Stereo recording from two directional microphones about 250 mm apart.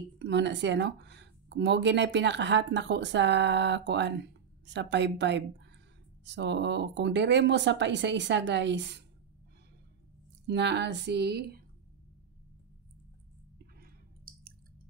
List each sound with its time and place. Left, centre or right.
0.2 s speech: right
10.4 s speech: right
13.7 s a sound: right